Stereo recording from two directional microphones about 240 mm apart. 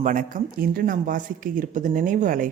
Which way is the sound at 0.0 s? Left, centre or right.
Right.